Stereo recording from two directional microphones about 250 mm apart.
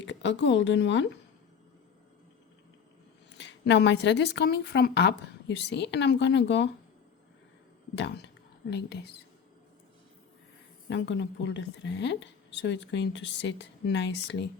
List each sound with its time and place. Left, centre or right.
0.0 s a woman's voice: left
3.3 s speech: left
7.9 s speech: left
10.8 s speech: left